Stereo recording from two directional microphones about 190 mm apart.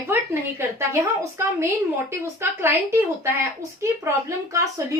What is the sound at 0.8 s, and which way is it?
A woman's voice, 15° right (ahead or behind).